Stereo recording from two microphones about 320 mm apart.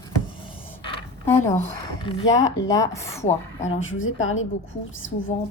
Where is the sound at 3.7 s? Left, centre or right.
Left.